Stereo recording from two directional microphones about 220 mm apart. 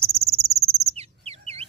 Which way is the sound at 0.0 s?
30° right (ahead or behind).